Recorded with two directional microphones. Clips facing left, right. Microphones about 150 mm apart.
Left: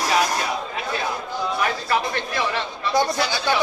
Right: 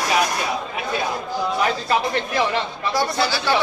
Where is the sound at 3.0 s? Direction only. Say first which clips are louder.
Even; 20° left (ahead or behind).